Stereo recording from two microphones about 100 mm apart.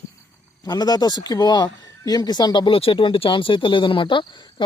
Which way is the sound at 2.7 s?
65° left (ahead or behind).